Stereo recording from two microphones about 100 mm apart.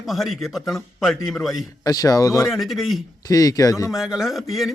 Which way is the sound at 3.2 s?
40° left (ahead or behind).